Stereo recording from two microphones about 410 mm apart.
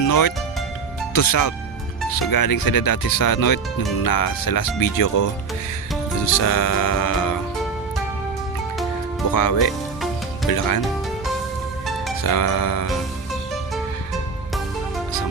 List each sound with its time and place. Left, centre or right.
0.0 s speech: left
6.3 s speech: left
9.3 s speech: left
12.2 s speech: left